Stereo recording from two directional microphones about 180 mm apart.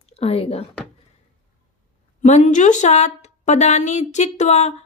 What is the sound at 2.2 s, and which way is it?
A woman's voice, 40° left (ahead or behind).